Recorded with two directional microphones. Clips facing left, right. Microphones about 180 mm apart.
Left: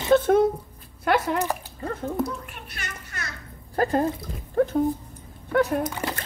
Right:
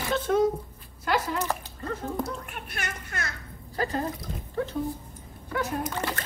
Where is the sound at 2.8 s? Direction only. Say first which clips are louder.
Right 4 dB; 50° right (ahead or behind).